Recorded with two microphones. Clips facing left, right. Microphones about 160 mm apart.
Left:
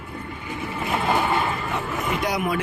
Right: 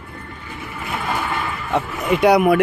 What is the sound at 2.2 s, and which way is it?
Speech, 70° right (ahead or behind).